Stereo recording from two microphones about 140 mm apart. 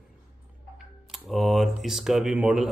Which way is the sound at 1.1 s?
Centre (ahead or behind).